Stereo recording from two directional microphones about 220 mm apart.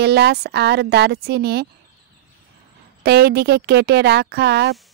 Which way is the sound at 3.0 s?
45° right (ahead or behind).